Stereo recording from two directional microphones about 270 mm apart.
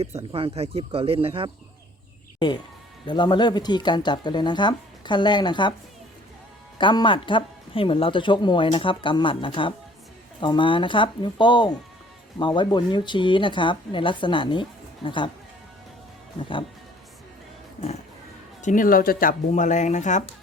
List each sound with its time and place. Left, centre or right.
0.1 s speech: centre
3.1 s speech: centre
6.7 s speech: centre
18.6 s speech: left